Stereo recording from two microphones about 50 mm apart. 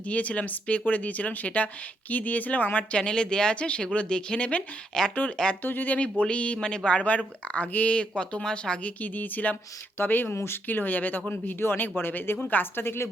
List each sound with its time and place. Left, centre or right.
0.0 s speech: left
3.0 s speech: centre
4.9 s speech: centre
5.6 s speech: left
6.0 s speech: left
7.9 s speech: centre
9.0 s speech: left
10.3 s speech: left
10.7 s speech: left
12.8 s speech: left